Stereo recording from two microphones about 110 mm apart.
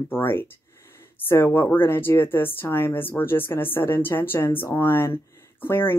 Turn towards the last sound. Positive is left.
turn(degrees=20)  # may be behind; listen again after turning